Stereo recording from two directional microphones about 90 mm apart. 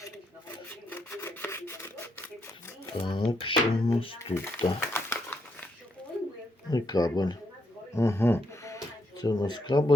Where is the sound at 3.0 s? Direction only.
60° left (ahead or behind).